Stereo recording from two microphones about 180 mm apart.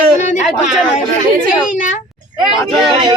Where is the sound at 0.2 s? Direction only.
40° left (ahead or behind).